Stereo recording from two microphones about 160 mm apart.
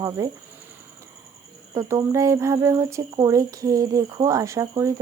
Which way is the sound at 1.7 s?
20° right (ahead or behind).